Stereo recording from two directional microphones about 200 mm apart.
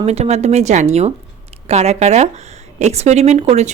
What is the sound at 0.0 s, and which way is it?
A woman's voice, 35° right (ahead or behind).